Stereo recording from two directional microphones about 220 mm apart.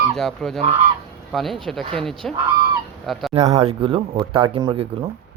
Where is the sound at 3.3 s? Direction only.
30° right (ahead or behind).